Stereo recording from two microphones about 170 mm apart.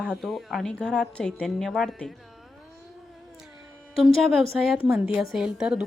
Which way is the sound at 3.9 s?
Centre (ahead or behind).